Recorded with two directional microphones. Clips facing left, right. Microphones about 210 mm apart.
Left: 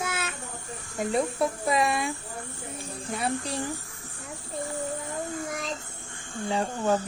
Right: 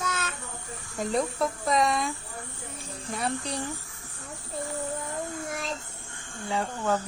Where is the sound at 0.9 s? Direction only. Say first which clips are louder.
Left 1 dB; 5° left (ahead or behind).